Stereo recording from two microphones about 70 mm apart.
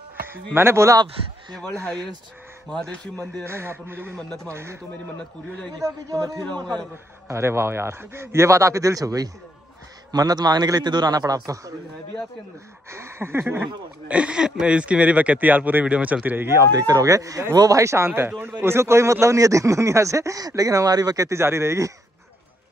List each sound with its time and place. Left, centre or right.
0.6 s speech: right
2.7 s speech: centre
3.4 s speech: right
5.8 s speech: right
7.2 s a man's voice: right
12.9 s speech: right
14.0 s speech: centre
16.4 s speech: right
16.7 s speech: right
21.4 s speech: right